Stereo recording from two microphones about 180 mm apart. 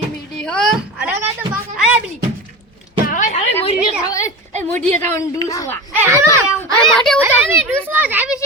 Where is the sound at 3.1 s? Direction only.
45° left (ahead or behind).